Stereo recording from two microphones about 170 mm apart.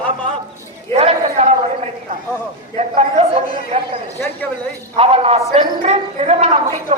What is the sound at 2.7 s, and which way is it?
Speech, 40° right (ahead or behind).